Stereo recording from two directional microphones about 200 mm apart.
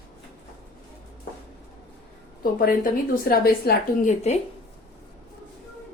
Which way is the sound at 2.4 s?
45° left (ahead or behind).